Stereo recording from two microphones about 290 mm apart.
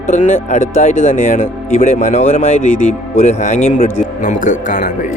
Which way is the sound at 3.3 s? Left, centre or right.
Left.